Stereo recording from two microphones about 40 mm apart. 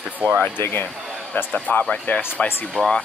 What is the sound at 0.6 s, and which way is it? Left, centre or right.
Speech, left.